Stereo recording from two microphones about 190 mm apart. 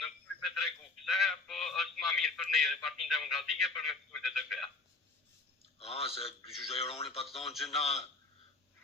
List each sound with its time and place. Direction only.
0.6 s telephone: centre (ahead or behind)
5.8 s a man's voice: 30° left (ahead or behind)
7.5 s a man's voice: centre (ahead or behind)
7.8 s a man's voice: 35° left (ahead or behind)